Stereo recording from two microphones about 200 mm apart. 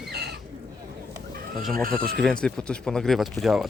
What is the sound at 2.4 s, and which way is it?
Speech, 5° left (ahead or behind).